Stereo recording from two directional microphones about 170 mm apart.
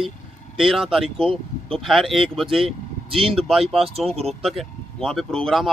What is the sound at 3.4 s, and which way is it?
Speech, centre (ahead or behind).